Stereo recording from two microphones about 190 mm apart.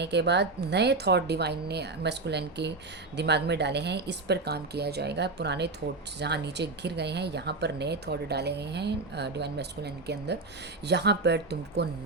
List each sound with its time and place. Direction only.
0.0 s speech: 65° right (ahead or behind)